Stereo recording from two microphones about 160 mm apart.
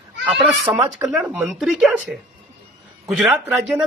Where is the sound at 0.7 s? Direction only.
15° right (ahead or behind).